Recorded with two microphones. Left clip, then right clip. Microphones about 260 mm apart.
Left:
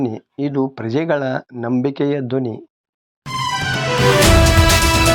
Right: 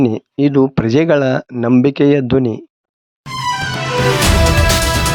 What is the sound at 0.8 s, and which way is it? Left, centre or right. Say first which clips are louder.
Speech: right 6 dB; right.